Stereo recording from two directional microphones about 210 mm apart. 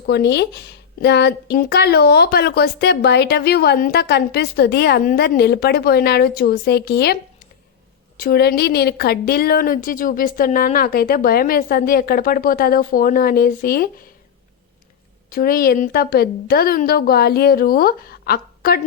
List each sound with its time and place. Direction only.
0.0 s a woman's voice: 55° left (ahead or behind)
8.2 s a woman's voice: 50° left (ahead or behind)
15.3 s a woman's voice: 45° left (ahead or behind)